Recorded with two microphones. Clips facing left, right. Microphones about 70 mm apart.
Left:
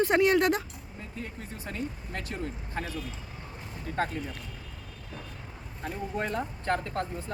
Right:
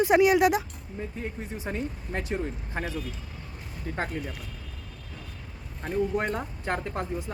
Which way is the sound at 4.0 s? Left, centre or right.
Centre.